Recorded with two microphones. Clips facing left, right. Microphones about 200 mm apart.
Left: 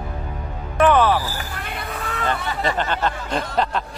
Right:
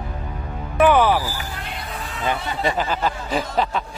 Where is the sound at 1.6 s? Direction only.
60° left (ahead or behind).